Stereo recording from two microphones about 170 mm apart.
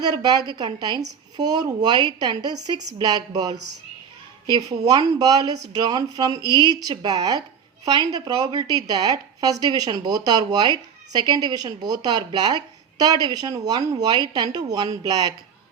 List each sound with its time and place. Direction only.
0.0 s a woman's voice: 25° right (ahead or behind)